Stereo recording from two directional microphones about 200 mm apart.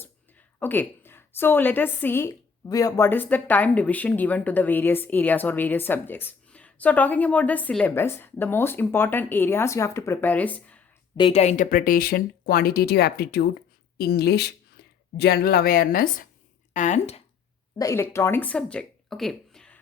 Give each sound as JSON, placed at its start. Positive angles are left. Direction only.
{"t": 0.6, "sound": "a woman's voice", "side_deg": 10}
{"t": 11.2, "sound": "speech", "side_deg": 30}
{"t": 17.7, "sound": "speech", "side_deg": 15}